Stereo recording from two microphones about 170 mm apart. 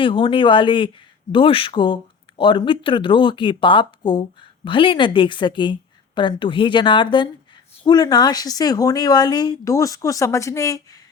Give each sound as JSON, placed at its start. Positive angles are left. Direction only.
{"t": 0.0, "sound": "speech", "side_deg": 30}